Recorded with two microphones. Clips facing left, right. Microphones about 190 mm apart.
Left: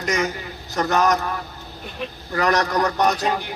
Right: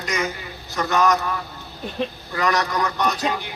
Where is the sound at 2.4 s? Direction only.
40° left (ahead or behind).